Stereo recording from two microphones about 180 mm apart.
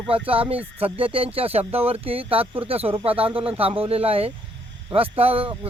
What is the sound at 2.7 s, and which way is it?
Speech, 30° right (ahead or behind).